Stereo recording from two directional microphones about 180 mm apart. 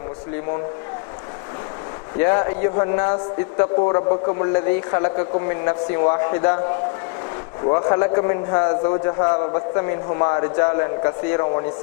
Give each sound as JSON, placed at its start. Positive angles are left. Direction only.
{"t": 2.1, "sound": "a man's voice", "side_deg": 20}
{"t": 7.7, "sound": "a man's voice", "side_deg": 25}